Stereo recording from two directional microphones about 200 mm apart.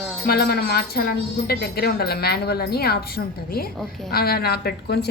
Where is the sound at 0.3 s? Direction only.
50° left (ahead or behind).